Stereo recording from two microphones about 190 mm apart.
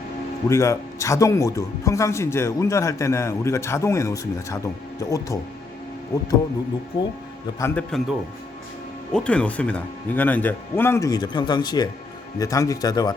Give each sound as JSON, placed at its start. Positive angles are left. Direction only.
{"t": 0.4, "sound": "speech", "side_deg": 15}
{"t": 7.6, "sound": "speech", "side_deg": 5}
{"t": 9.1, "sound": "speech", "side_deg": 5}